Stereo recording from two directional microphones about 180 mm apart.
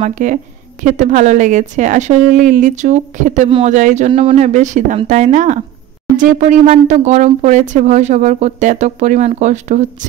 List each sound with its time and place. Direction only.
0.0 s a woman's voice: 45° right (ahead or behind)
3.4 s speech: 30° right (ahead or behind)
3.7 s a woman's voice: 45° right (ahead or behind)